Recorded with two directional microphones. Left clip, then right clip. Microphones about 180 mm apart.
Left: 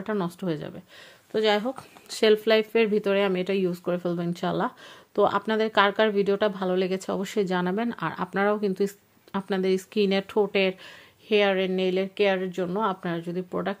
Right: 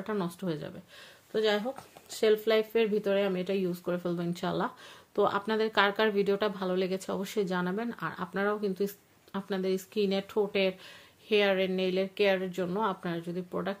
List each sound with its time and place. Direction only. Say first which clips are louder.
0.0 s speech: left 5 dB; 30° left (ahead or behind)
1.3 s speech: left 5 dB; 45° left (ahead or behind)